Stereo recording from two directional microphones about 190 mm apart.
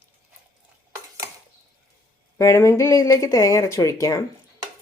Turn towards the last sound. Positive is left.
turn(degrees=15)  # may be behind; listen again after turning